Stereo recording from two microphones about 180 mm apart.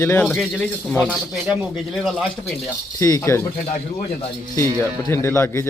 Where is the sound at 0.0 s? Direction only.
10° left (ahead or behind).